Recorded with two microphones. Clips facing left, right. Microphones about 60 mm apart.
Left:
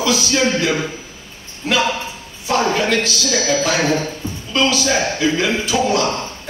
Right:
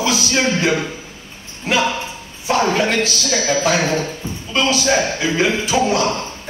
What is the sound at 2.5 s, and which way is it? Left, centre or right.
Music, right.